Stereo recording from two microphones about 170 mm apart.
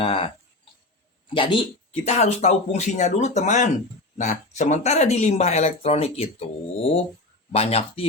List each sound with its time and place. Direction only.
0.0 s speech: 30° left (ahead or behind)
1.3 s speech: 30° left (ahead or behind)